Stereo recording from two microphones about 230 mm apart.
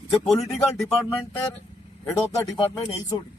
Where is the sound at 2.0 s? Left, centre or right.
Centre.